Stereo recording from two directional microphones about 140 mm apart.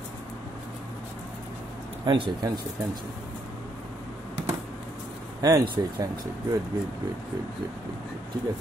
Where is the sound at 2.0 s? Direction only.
35° right (ahead or behind).